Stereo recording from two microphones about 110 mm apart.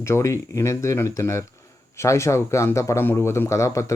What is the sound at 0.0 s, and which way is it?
Speech, 25° left (ahead or behind).